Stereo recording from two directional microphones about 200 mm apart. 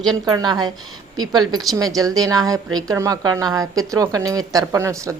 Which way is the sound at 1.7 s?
15° right (ahead or behind).